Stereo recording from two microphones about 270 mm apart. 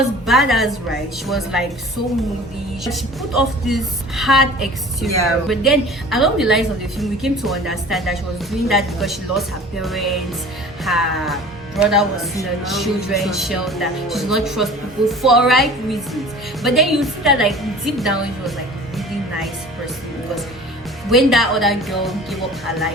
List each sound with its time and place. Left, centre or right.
0.3 s a woman's voice: centre
2.8 s a woman's voice: centre
21.1 s a woman's voice: centre